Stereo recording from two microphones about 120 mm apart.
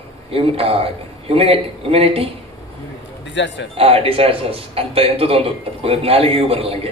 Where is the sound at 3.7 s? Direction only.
55° right (ahead or behind).